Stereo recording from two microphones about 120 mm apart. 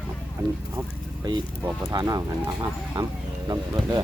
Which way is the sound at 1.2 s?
35° right (ahead or behind).